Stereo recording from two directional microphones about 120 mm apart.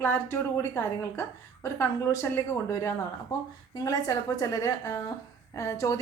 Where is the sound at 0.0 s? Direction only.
20° left (ahead or behind).